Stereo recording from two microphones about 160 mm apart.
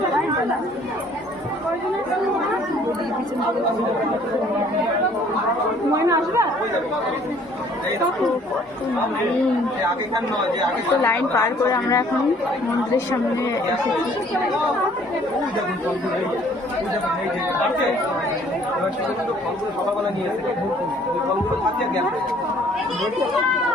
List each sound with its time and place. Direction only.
6.0 s speech: 20° right (ahead or behind)
11.0 s a woman's voice: 15° left (ahead or behind)